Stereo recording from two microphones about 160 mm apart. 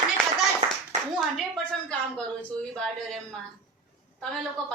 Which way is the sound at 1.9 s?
5° left (ahead or behind).